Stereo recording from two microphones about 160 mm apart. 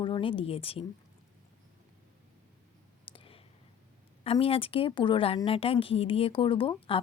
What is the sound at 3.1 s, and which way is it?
Clicking, 35° left (ahead or behind).